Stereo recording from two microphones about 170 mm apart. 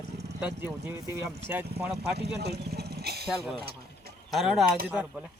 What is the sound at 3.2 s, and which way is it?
Speech, centre (ahead or behind).